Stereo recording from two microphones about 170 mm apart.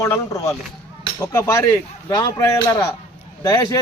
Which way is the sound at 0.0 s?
15° left (ahead or behind).